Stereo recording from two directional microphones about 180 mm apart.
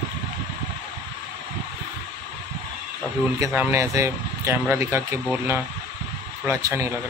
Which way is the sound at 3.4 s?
10° right (ahead or behind).